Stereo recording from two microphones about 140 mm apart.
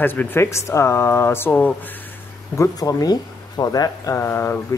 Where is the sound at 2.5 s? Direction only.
25° left (ahead or behind).